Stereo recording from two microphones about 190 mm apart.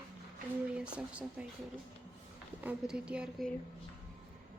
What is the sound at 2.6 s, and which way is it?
Speech, 5° right (ahead or behind).